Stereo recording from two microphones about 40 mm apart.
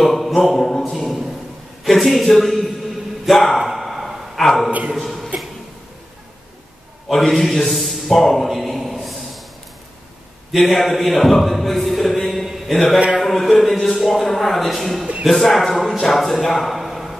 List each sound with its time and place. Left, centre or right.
0.0 s a sound: centre
1.9 s speech: centre
2.3 s a sound: centre
4.4 s speech: centre
7.1 s a man's voice: centre
10.5 s speech: centre
12.4 s mantra: centre
13.2 s speech: centre